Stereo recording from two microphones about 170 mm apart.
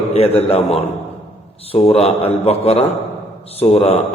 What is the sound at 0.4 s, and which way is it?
A man's voice, 35° left (ahead or behind).